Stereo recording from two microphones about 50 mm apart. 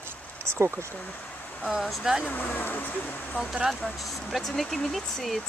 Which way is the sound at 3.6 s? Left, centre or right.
Centre.